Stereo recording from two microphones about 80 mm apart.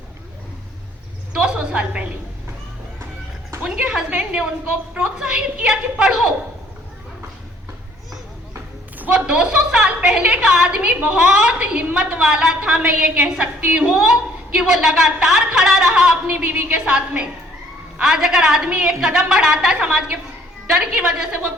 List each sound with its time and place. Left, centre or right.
1.3 s a sound: centre
3.6 s a woman's voice: centre
9.1 s a woman's voice: centre
12.2 s a woman's voice: centre
16.3 s a woman's voice: right